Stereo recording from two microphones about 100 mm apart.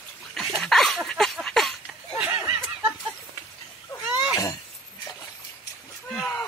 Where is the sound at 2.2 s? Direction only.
15° right (ahead or behind).